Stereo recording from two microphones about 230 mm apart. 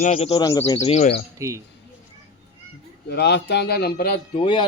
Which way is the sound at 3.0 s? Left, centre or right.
Left.